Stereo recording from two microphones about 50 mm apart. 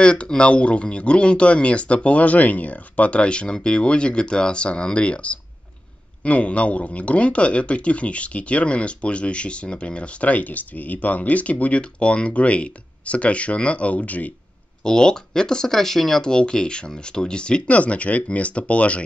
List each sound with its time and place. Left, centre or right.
0.0 s speech: centre
14.8 s speech: centre